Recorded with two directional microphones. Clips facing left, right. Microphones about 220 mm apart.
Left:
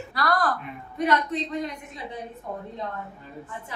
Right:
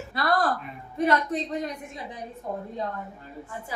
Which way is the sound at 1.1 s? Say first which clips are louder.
Even; 45° right (ahead or behind).